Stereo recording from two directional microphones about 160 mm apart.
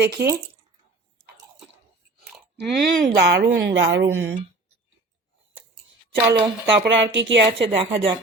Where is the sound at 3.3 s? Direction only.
90° right.